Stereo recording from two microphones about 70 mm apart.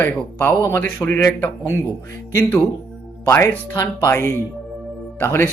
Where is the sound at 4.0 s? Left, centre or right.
Left.